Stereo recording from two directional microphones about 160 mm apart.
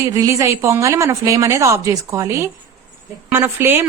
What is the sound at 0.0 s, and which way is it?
A woman's voice, 20° right (ahead or behind).